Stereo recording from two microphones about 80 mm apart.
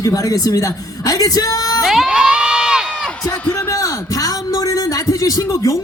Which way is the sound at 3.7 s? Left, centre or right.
Left.